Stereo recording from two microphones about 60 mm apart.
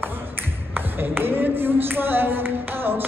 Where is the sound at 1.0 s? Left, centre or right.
Right.